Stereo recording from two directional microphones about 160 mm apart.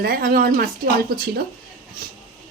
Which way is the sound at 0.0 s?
65° right (ahead or behind).